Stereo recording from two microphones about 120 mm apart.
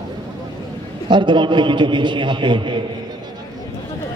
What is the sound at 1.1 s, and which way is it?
A man's voice, 40° right (ahead or behind).